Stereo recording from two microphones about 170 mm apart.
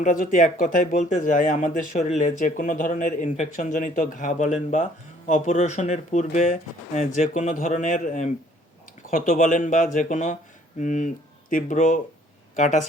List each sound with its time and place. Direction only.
0.0 s speech: 50° left (ahead or behind)